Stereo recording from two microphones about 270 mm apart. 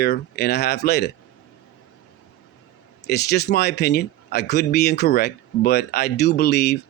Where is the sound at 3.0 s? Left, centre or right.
Left.